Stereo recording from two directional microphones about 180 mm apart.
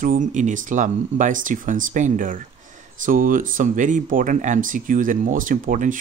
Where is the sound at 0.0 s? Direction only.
45° right (ahead or behind).